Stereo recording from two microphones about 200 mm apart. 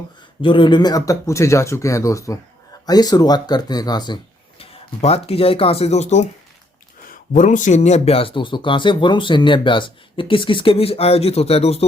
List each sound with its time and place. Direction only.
0.4 s speech: 25° left (ahead or behind)
4.6 s speech: 30° left (ahead or behind)